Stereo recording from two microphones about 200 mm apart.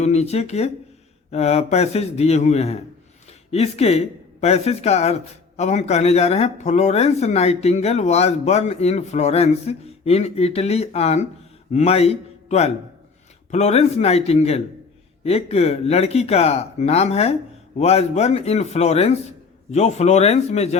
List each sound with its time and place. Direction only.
0.0 s a man's voice: 35° left (ahead or behind)